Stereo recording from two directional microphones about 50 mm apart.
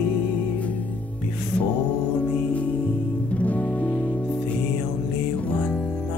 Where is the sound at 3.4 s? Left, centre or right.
Left.